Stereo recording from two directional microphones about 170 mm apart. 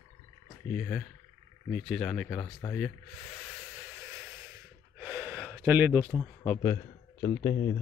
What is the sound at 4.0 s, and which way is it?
Snort, 5° right (ahead or behind).